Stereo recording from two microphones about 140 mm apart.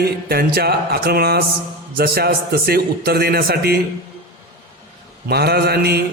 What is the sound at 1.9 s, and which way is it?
A man's voice, 90° right.